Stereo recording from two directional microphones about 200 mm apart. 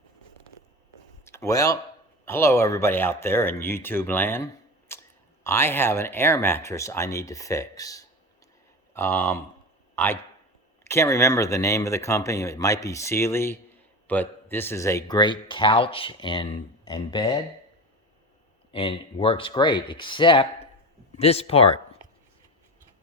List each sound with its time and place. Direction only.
1.2 s speech: 15° left (ahead or behind)
4.9 s a sound: 15° left (ahead or behind)
5.4 s speech: 15° left (ahead or behind)
18.7 s speech: 25° left (ahead or behind)